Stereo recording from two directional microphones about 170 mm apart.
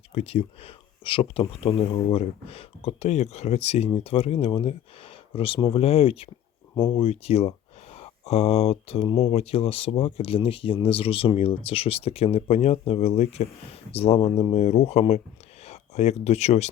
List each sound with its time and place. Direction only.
0.1 s speech: 35° left (ahead or behind)